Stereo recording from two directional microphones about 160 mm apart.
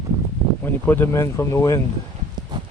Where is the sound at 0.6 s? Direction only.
15° left (ahead or behind).